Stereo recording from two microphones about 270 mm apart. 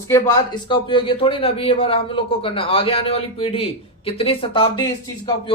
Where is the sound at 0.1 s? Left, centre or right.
Centre.